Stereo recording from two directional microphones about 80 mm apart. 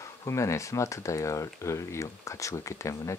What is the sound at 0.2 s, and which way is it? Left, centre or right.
Speech, left.